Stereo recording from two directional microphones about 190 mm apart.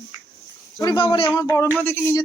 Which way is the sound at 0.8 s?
25° left (ahead or behind).